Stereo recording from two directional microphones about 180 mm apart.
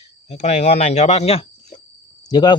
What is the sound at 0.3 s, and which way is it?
Speech, 40° left (ahead or behind).